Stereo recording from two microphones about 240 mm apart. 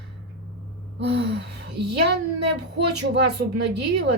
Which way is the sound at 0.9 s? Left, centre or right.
Right.